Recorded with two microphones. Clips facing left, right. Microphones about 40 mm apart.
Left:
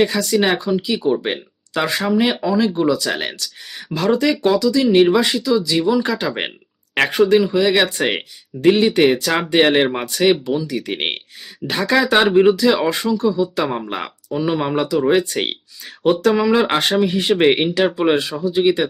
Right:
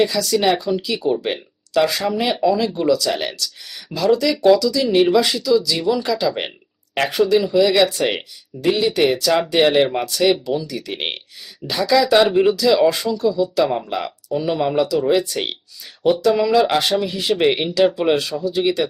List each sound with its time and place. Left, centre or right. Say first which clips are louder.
0.0 s speech: left 1 dB; left
0.3 s speech: even; centre
7.4 s speech: right 1 dB; left
11.7 s speech: right 1 dB; left
13.8 s speech: right 1 dB; left
14.3 s speech: even; centre; by 15.4 s left
16.3 s speech: even; left
17.8 s speech: even; centre